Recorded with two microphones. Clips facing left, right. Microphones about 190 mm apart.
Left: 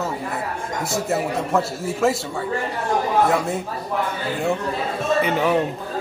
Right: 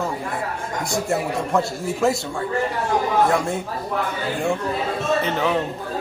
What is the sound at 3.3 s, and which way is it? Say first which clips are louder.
Speech: even; 5° left (ahead or behind).